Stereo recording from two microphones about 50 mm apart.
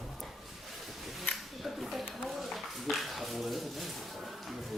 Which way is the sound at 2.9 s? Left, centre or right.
Centre.